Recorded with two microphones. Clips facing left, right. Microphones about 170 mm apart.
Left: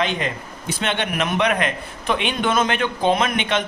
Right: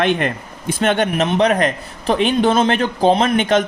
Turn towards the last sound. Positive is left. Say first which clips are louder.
# right 6 dB
turn(degrees=-40)  # may be behind; listen again after turning